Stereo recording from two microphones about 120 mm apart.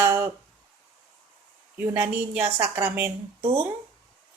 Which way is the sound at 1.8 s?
20° right (ahead or behind).